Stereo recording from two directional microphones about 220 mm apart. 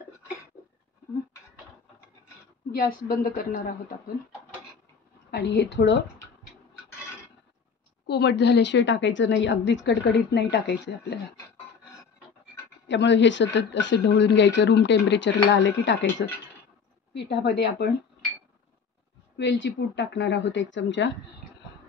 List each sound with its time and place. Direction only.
2.7 s a woman's voice: 45° left (ahead or behind)
5.3 s a woman's voice: 50° left (ahead or behind)
8.1 s a woman's voice: 50° left (ahead or behind)
12.8 s a woman's voice: 55° left (ahead or behind)
19.3 s speech: 55° left (ahead or behind)